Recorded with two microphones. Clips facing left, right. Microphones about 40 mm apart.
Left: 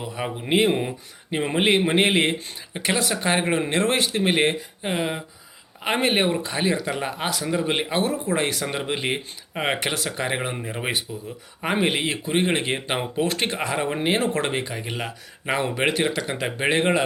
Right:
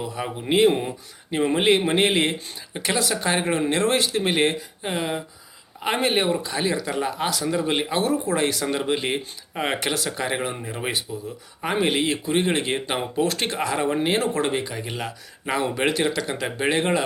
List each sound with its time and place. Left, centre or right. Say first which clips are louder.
0.0 s speech: even; centre
6.0 s speech: left 1 dB; left
8.6 s speech: right 2 dB; centre
9.9 s speech: even; left
14.2 s speech: right 1 dB; left